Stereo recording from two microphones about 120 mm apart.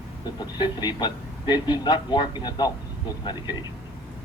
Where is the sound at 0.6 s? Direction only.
40° left (ahead or behind).